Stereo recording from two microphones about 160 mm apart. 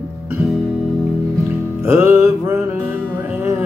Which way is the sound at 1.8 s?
15° right (ahead or behind).